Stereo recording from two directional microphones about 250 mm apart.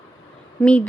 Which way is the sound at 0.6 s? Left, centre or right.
Centre.